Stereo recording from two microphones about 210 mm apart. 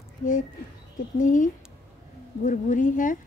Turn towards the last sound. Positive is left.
turn(degrees=40)  # may be behind; listen again after turning